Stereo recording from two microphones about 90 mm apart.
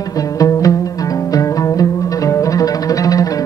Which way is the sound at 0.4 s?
40° left (ahead or behind).